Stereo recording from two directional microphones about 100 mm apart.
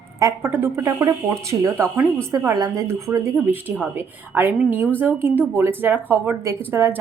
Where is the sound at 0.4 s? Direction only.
25° right (ahead or behind).